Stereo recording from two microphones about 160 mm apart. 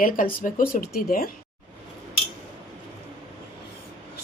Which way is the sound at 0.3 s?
60° left (ahead or behind).